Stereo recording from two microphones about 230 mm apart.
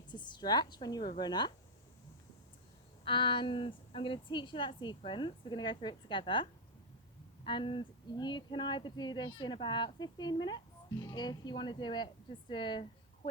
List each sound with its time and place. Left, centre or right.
0.1 s a woman's voice: centre
3.0 s speech: left